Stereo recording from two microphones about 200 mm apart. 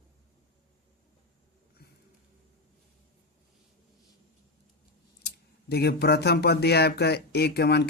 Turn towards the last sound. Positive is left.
turn(degrees=55)  # may be behind; listen again after turning